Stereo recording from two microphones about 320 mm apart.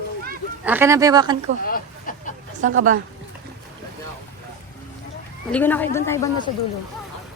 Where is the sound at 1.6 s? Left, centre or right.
Left.